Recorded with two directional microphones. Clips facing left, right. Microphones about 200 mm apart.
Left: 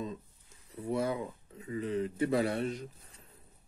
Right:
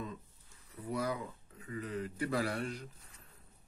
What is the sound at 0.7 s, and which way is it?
Speech, 25° left (ahead or behind).